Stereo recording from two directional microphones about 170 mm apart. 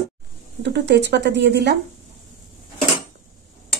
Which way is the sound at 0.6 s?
80° right.